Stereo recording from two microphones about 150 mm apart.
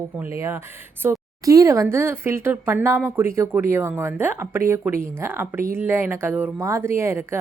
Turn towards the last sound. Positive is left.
turn(degrees=-15)  # may be behind; listen again after turning